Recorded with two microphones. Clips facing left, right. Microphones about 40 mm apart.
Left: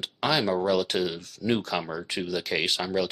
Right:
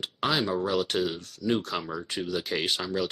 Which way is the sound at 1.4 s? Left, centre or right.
Left.